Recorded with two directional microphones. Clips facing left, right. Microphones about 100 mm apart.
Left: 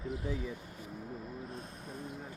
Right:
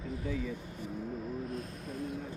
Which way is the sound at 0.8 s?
Centre (ahead or behind).